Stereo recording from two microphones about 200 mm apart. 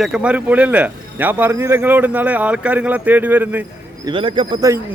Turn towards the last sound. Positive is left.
turn(degrees=-15)  # may be behind; listen again after turning